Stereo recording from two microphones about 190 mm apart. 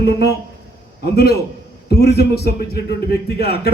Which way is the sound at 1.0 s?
55° left (ahead or behind).